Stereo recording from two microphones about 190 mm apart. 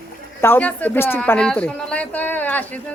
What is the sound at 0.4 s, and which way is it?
Speech, 10° left (ahead or behind).